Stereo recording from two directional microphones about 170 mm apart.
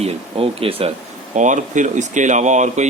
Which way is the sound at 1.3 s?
45° right (ahead or behind).